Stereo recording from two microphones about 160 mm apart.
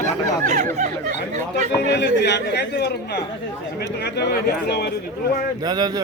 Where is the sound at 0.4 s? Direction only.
50° right (ahead or behind).